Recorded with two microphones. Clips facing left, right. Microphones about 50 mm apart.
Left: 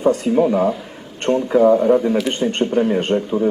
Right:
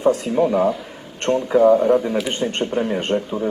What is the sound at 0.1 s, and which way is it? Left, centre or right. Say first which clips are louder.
Speech: left 2 dB; centre.